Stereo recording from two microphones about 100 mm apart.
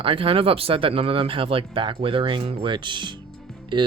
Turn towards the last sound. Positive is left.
turn(degrees=-50)  # may be behind; listen again after turning